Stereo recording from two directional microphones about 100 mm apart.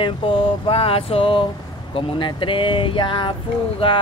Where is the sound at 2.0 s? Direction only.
60° left (ahead or behind).